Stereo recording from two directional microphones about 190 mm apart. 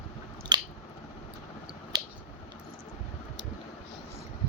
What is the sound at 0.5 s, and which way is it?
Squish, 25° right (ahead or behind).